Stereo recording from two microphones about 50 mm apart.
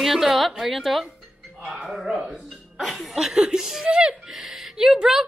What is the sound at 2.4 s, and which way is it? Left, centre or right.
Music, centre.